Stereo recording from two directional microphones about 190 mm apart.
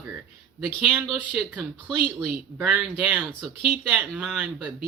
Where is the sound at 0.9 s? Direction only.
Centre (ahead or behind).